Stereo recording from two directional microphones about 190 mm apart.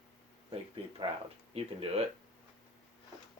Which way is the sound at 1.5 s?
30° right (ahead or behind).